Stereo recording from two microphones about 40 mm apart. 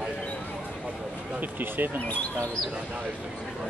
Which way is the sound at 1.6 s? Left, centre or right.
Right.